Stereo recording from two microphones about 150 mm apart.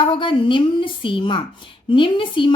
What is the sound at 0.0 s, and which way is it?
Speech, 35° left (ahead or behind).